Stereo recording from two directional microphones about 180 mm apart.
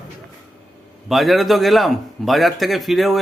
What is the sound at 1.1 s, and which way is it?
Speech, centre (ahead or behind).